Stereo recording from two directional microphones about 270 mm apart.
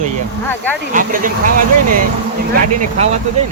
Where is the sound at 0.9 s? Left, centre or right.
Right.